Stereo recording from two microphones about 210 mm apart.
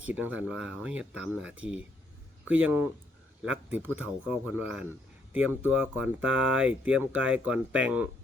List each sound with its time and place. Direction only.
0.0 s speech: 5° right (ahead or behind)
3.4 s speech: 5° right (ahead or behind)
6.1 s speech: 65° right (ahead or behind)
6.6 s speech: 5° right (ahead or behind)